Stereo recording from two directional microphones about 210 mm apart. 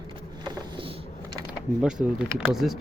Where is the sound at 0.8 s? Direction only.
20° right (ahead or behind).